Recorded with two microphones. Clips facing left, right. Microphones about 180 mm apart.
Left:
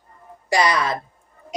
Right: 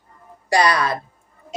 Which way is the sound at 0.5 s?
20° left (ahead or behind).